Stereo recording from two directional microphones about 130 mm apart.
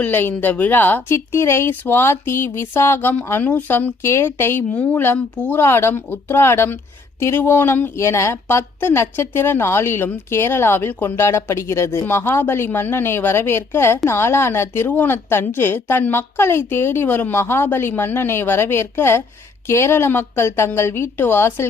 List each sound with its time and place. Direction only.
0.0 s a woman's voice: 15° left (ahead or behind)